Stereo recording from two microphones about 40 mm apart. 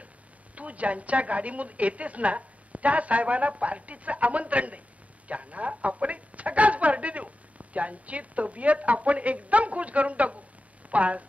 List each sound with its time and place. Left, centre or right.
0.6 s a woman's voice: right